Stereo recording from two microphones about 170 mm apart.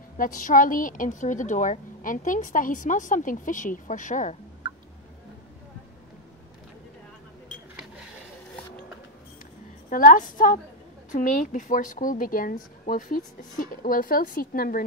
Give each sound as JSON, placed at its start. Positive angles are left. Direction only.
{"t": 0.2, "sound": "a woman's voice", "side_deg": 50}
{"t": 4.6, "sound": "a sound", "side_deg": -30}
{"t": 9.8, "sound": "a woman's voice", "side_deg": 50}